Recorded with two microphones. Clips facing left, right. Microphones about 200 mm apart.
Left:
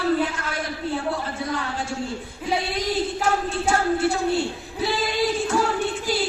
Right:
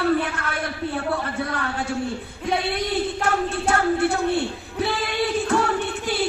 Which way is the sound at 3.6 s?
60° right (ahead or behind).